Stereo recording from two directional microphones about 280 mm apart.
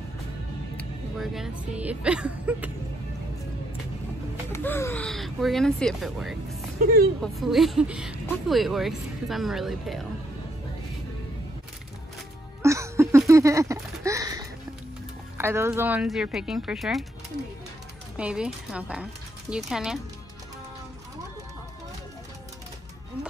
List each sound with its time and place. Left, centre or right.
0.7 s speech: centre
4.5 s speech: centre
12.6 s a sound: centre
15.3 s speech: centre
18.1 s speech: centre